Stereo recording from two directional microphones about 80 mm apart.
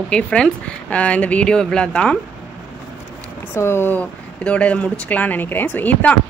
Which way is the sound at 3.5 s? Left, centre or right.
Left.